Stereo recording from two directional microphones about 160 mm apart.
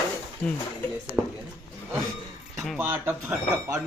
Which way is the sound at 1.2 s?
Centre (ahead or behind).